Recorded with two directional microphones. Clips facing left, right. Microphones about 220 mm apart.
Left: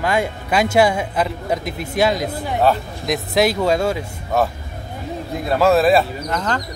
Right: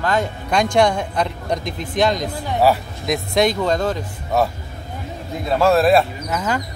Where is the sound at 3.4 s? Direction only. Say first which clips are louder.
Left 1 dB; 5° left (ahead or behind).